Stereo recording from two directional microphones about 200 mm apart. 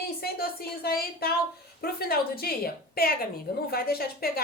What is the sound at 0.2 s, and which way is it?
A woman's voice, 50° left (ahead or behind).